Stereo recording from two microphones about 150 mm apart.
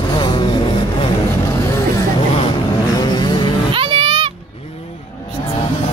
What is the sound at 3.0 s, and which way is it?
Vehicle, 30° left (ahead or behind).